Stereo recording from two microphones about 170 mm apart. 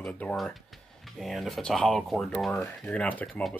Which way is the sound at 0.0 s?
5° left (ahead or behind).